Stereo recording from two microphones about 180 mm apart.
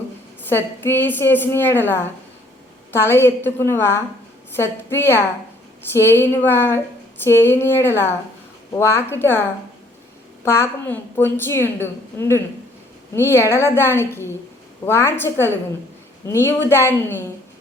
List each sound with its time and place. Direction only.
0.4 s a woman's voice: 10° left (ahead or behind)
10.4 s a woman's voice: 15° left (ahead or behind)